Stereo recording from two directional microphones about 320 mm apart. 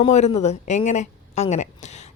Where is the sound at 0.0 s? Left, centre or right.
Centre.